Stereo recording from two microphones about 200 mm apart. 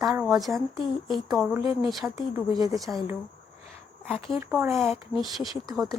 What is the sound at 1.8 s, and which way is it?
Speech, centre (ahead or behind).